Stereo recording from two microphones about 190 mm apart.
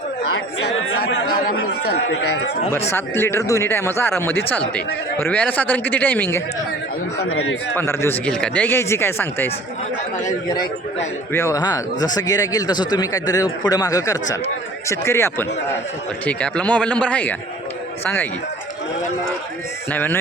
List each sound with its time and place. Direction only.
1.1 s chatter: 65° left (ahead or behind)
2.9 s speech: 10° left (ahead or behind)
7.2 s speech: 90° left
7.8 s speech: 10° left (ahead or behind)
19.9 s speech: 10° left (ahead or behind)